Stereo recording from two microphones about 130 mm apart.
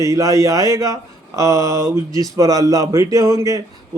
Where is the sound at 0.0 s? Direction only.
25° right (ahead or behind).